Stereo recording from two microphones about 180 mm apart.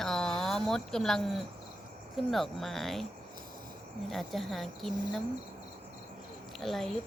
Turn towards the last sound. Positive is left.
turn(degrees=0)  # may be behind; listen again after turning